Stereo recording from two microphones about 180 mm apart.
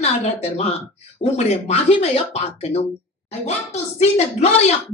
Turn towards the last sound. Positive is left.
turn(degrees=40)  # may be behind; listen again after turning